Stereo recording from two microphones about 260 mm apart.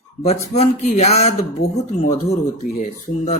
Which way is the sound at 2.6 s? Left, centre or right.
Left.